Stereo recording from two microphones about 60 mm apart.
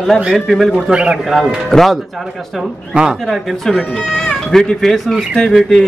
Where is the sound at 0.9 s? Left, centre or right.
Centre.